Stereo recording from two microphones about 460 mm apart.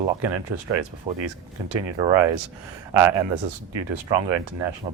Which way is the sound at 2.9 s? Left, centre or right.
Right.